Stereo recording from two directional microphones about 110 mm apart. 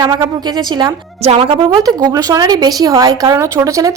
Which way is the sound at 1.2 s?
70° right (ahead or behind).